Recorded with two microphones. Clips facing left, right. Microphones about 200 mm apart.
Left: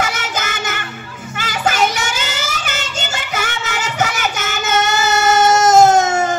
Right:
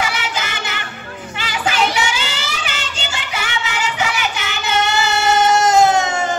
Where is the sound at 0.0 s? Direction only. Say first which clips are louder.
Left 1 dB; 45° left (ahead or behind).